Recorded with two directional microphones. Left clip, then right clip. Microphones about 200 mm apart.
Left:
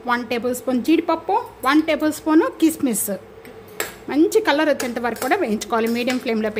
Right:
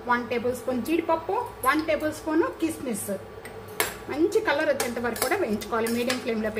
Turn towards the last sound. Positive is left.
turn(degrees=55)  # may be behind; listen again after turning